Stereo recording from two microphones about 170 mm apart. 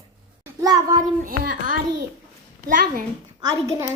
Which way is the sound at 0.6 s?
20° right (ahead or behind).